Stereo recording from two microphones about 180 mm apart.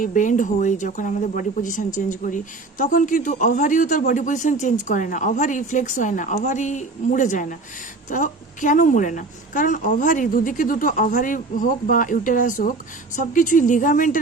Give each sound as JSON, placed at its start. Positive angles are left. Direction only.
{"t": 0.0, "sound": "speech", "side_deg": 45}